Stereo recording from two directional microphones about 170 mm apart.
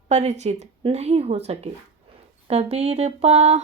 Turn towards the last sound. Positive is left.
turn(degrees=-40)  # may be behind; listen again after turning